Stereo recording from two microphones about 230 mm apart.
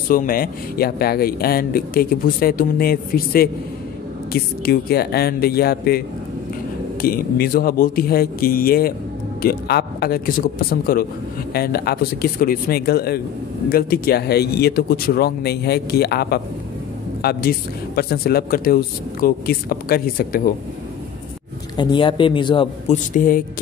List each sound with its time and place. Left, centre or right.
0.1 s a woman's voice: left
21.7 s speech: left
23.1 s a woman's voice: left